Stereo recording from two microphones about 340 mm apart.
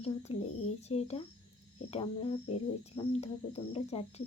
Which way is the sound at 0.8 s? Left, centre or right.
Centre.